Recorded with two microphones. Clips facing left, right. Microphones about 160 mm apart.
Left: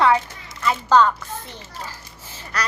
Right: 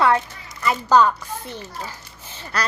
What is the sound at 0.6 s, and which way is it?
Speech, 10° right (ahead or behind).